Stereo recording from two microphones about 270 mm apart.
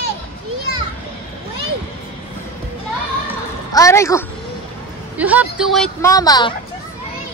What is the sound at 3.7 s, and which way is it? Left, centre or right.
Speech, centre.